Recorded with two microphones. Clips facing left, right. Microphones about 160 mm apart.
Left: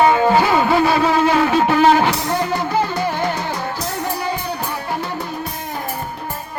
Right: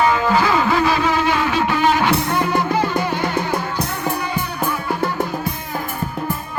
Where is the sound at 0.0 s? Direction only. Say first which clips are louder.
Left 3 dB; 25° left (ahead or behind).